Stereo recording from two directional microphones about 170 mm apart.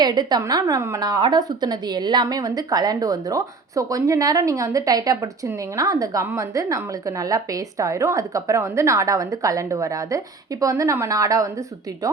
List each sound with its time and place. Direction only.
0.0 s a woman's voice: 25° right (ahead or behind)